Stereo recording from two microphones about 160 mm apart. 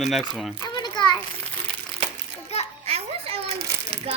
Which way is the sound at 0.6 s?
25° left (ahead or behind).